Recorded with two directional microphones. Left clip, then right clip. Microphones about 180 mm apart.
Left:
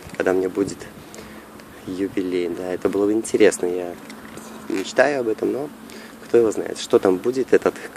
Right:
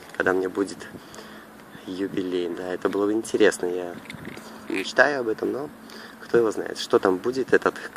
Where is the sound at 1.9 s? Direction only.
5° left (ahead or behind).